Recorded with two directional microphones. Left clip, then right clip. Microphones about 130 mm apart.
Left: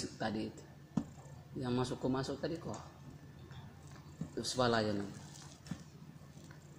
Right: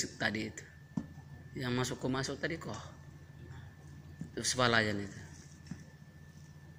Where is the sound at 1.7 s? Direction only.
Centre (ahead or behind).